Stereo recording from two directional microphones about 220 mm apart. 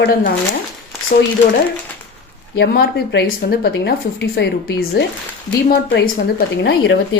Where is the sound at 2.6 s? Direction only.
50° left (ahead or behind).